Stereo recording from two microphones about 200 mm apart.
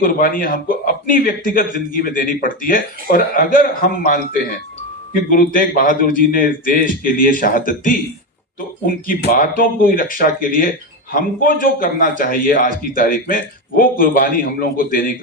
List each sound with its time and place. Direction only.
0.0 s a man's voice: 45° left (ahead or behind)